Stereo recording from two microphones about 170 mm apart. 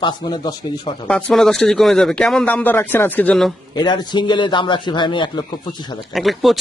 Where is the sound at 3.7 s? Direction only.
25° left (ahead or behind).